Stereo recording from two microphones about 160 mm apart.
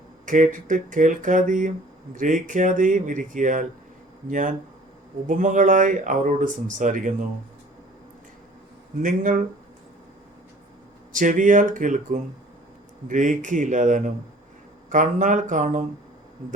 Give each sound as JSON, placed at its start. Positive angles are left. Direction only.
{"t": 0.3, "sound": "speech", "side_deg": -55}
{"t": 9.0, "sound": "speech", "side_deg": -55}
{"t": 11.1, "sound": "speech", "side_deg": -55}